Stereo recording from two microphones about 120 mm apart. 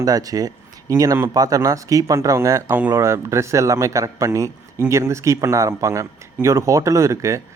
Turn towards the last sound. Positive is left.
turn(degrees=-25)  # may be behind; listen again after turning